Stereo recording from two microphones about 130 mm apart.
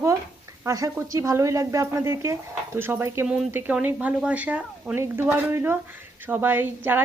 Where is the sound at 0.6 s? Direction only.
25° right (ahead or behind).